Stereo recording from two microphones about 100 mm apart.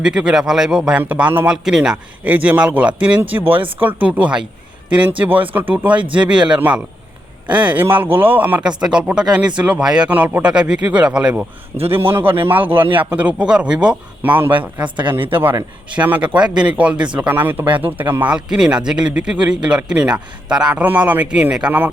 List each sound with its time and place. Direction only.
0.0 s a man's voice: 10° right (ahead or behind)
1.5 s a man's voice: 5° right (ahead or behind)
11.9 s a man's voice: 25° right (ahead or behind)
16.0 s a man's voice: 15° right (ahead or behind)